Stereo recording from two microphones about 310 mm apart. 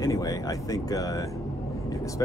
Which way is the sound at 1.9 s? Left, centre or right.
Centre.